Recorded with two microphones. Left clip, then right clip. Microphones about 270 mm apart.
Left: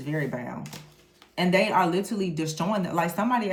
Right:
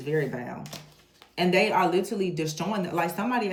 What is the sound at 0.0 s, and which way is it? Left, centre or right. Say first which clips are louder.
Speech: right 3 dB; centre.